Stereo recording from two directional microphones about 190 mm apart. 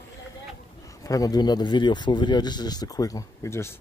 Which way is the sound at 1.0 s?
20° left (ahead or behind).